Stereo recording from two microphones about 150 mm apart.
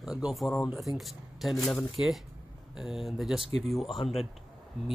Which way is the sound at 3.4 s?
40° right (ahead or behind).